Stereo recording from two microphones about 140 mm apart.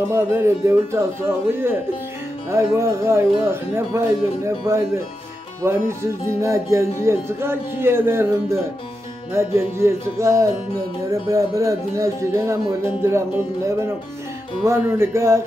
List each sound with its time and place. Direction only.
0.1 s speech: 20° right (ahead or behind)
14.6 s speech: 20° right (ahead or behind)